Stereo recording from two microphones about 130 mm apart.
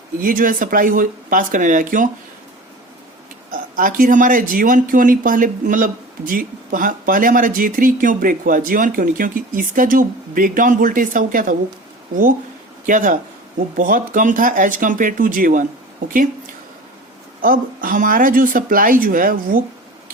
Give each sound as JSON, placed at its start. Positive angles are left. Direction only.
{"t": 0.2, "sound": "speech", "side_deg": -90}
{"t": 3.5, "sound": "speech", "side_deg": -90}
{"t": 17.4, "sound": "speech", "side_deg": -90}